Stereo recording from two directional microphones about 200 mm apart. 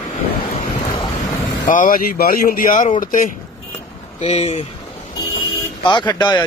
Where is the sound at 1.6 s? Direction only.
40° left (ahead or behind).